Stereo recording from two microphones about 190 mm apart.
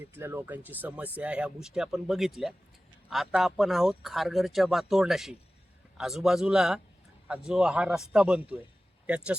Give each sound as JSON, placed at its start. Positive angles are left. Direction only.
{"t": 0.0, "sound": "speech", "side_deg": -10}